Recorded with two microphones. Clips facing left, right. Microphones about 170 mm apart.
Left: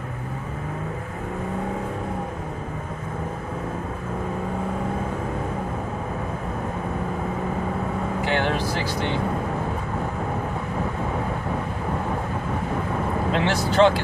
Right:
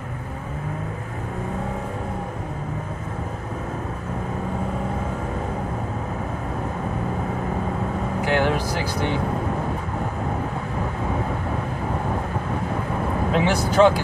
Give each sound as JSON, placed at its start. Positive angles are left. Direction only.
{"t": 8.3, "sound": "vehicle", "side_deg": -10}
{"t": 13.3, "sound": "vehicle", "side_deg": -10}